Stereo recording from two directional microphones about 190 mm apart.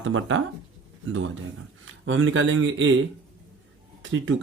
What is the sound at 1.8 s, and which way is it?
Speech, 90° right.